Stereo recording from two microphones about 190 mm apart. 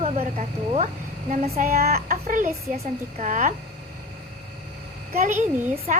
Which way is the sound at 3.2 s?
45° right (ahead or behind).